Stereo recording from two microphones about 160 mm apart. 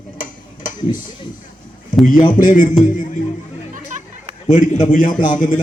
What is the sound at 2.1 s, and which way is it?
A man's voice, 55° left (ahead or behind).